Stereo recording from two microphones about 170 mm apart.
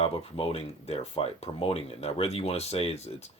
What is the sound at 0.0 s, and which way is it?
Speech, 35° left (ahead or behind).